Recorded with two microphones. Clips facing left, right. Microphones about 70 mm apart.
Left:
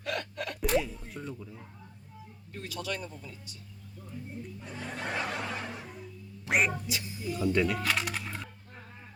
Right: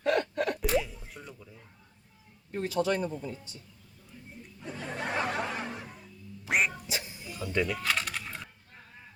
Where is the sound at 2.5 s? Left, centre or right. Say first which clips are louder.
Right 8 dB; right.